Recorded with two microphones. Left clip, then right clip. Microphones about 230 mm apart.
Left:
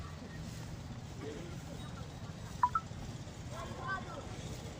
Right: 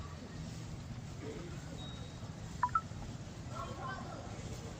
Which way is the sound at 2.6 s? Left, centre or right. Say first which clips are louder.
Left 2 dB; centre.